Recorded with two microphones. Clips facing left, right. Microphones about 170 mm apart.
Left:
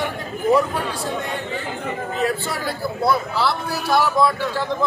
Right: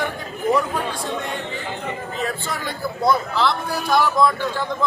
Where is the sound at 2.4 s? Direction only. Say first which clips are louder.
Left 2 dB; 5° left (ahead or behind).